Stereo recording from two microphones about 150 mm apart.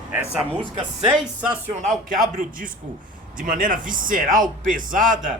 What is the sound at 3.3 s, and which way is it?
Speech, 65° right (ahead or behind).